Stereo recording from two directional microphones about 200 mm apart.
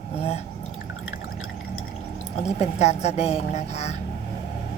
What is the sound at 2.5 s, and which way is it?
Speech, 35° left (ahead or behind).